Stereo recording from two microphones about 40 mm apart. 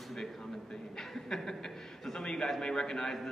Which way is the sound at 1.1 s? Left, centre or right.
Centre.